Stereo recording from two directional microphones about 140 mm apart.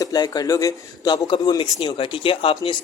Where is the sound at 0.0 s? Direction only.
30° left (ahead or behind).